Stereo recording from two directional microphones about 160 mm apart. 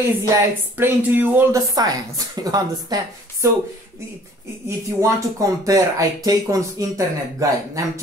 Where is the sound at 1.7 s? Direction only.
25° right (ahead or behind).